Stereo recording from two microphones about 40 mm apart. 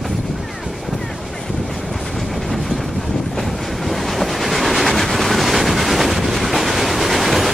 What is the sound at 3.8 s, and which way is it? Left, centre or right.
Train, centre.